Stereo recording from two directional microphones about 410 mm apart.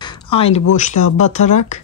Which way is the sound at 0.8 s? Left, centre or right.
Centre.